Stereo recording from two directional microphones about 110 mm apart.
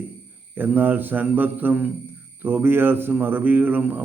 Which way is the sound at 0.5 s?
15° right (ahead or behind).